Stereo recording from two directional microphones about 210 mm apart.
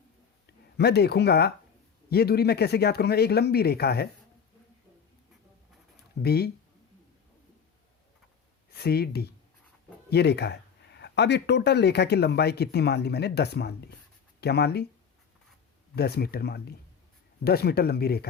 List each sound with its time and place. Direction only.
0.4 s speech: 50° left (ahead or behind)
6.2 s speech: 50° left (ahead or behind)
8.7 s speech: 50° left (ahead or behind)
16.0 s speech: 50° left (ahead or behind)